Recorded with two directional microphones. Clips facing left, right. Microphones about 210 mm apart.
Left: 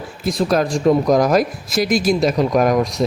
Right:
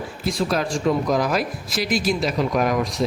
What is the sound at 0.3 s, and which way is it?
Speech, 40° left (ahead or behind).